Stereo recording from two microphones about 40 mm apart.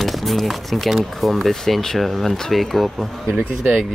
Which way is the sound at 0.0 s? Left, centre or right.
Centre.